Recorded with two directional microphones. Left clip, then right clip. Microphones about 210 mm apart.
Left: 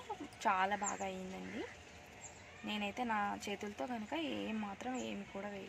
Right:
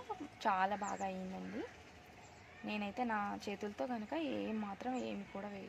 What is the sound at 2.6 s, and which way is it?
Speech, 30° right (ahead or behind).